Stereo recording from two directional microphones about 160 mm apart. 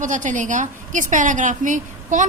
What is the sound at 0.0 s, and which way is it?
A woman's voice, 50° right (ahead or behind).